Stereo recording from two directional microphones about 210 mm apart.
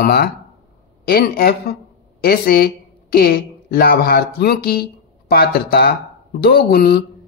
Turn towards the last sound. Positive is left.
turn(degrees=50)  # may be behind; listen again after turning